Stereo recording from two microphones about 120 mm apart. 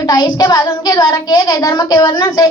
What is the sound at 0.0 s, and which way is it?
Child singing, 35° left (ahead or behind).